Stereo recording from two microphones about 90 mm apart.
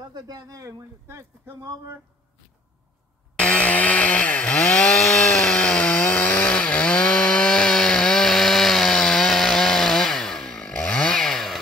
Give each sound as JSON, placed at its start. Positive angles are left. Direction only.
{"t": 0.0, "sound": "speech", "side_deg": -45}
{"t": 3.3, "sound": "chainsaw", "side_deg": 10}